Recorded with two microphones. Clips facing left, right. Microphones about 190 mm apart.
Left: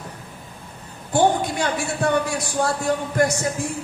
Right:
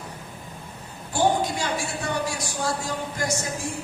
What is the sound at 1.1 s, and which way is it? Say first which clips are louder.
Speech: left 4 dB; 60° left (ahead or behind).